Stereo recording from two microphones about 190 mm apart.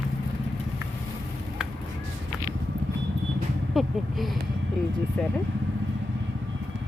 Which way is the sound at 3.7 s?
Centre (ahead or behind).